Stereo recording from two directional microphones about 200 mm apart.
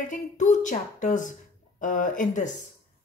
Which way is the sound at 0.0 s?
40° left (ahead or behind).